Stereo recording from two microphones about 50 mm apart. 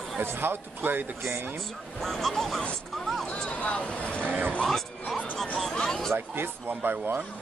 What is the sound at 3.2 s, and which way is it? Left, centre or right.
Speech, left.